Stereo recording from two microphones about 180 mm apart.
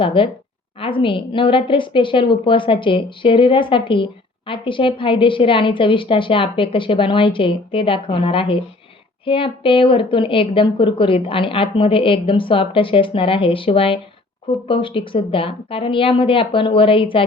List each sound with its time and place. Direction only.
0.0 s a woman's voice: 30° left (ahead or behind)